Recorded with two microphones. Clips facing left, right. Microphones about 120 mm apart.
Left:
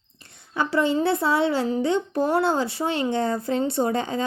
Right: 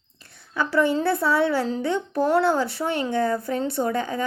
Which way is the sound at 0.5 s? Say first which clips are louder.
Even; 20° left (ahead or behind).